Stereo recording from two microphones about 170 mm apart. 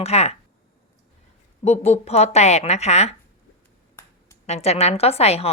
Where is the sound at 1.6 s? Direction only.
40° left (ahead or behind).